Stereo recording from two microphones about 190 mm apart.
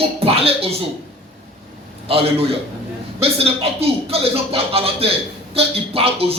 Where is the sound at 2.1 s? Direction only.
30° right (ahead or behind).